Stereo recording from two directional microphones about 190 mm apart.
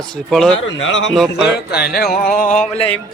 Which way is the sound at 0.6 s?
75° left (ahead or behind).